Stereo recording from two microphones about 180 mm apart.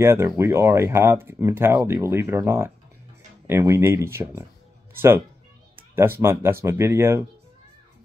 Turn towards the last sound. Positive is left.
turn(degrees=-15)  # may be behind; listen again after turning